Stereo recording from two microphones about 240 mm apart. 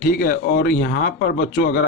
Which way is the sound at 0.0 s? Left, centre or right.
Left.